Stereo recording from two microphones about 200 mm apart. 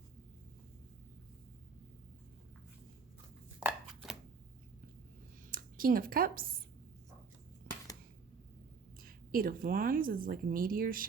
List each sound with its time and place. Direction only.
3.6 s chopping: 5° right (ahead or behind)
5.5 s speech: 45° right (ahead or behind)
9.0 s speech: 45° right (ahead or behind)